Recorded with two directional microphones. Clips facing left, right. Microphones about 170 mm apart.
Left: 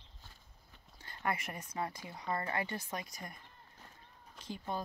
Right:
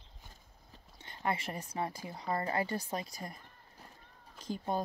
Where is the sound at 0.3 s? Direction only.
35° right (ahead or behind).